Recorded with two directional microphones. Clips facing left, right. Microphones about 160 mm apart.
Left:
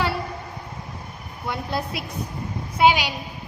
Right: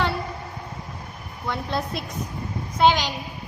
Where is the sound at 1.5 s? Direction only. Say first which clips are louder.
Even; 5° left (ahead or behind).